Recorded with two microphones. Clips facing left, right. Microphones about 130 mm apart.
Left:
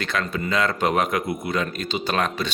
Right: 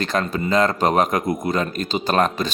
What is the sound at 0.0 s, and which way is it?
Speech, 40° right (ahead or behind).